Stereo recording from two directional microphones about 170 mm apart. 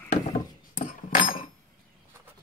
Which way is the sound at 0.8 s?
55° left (ahead or behind).